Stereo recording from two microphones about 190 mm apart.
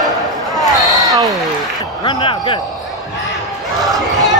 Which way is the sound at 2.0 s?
25° left (ahead or behind).